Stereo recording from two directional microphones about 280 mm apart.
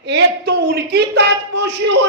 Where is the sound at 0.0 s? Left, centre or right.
Right.